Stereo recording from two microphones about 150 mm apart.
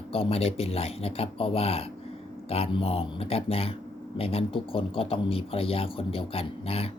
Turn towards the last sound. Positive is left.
turn(degrees=40)  # may be behind; listen again after turning